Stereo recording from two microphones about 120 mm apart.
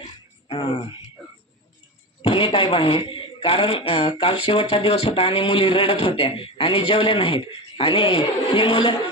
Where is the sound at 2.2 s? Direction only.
50° left (ahead or behind).